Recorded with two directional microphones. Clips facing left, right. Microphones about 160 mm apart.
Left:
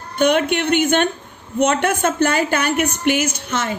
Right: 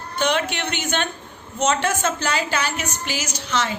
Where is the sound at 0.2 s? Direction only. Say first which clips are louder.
Left 6 dB; 55° left (ahead or behind).